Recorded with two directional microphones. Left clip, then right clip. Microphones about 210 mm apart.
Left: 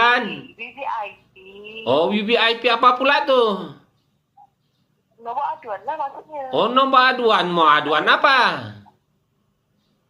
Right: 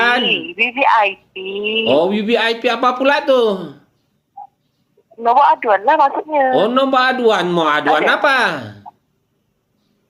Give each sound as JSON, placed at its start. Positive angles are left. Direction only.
{"t": 0.5, "sound": "a man's voice", "side_deg": -50}
{"t": 1.8, "sound": "speech", "side_deg": -30}
{"t": 5.2, "sound": "a man's voice", "side_deg": -50}
{"t": 6.5, "sound": "speech", "side_deg": -35}